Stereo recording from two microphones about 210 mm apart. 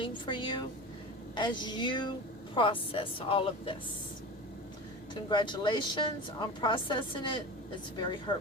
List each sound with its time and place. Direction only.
0.0 s a woman's voice: 25° left (ahead or behind)
5.3 s a woman's voice: 20° left (ahead or behind)